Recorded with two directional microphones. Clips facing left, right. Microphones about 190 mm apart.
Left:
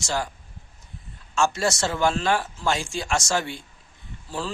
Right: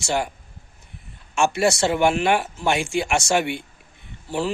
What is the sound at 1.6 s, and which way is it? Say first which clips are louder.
Speech: right 5 dB; 20° right (ahead or behind).